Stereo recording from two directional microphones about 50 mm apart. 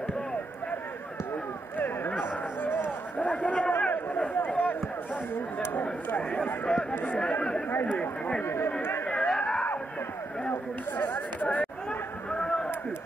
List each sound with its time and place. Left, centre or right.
1.8 s a sound: left
3.2 s a sound: left
6.3 s speech: left
7.8 s speech: left
8.4 s speech: left
9.0 s chatter: left
10.5 s speech: left
11.4 s speech: left
12.3 s a sound: centre